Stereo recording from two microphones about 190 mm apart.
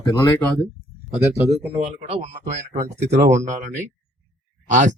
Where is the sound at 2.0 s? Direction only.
35° right (ahead or behind).